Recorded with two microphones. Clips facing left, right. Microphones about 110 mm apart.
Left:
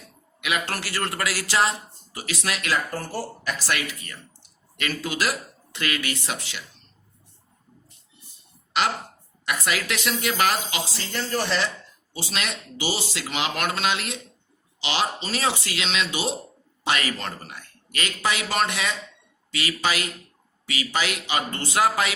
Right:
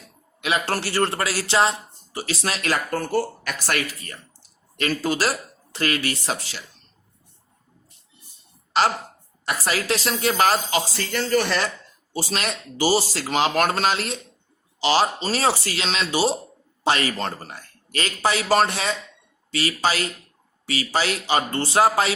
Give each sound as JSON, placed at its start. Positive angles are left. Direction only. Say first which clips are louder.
{"t": 0.4, "sound": "a man's voice", "louder": "right 4 dB", "side_deg": -35}
{"t": 2.9, "sound": "speech", "louder": "right 7 dB", "side_deg": -65}
{"t": 3.7, "sound": "a man's voice", "louder": "right 5 dB", "side_deg": -40}
{"t": 8.7, "sound": "a man's voice", "louder": "right 4 dB", "side_deg": -35}
{"t": 10.9, "sound": "speech", "louder": "right 5 dB", "side_deg": -60}
{"t": 12.1, "sound": "a man's voice", "louder": "right 4 dB", "side_deg": -40}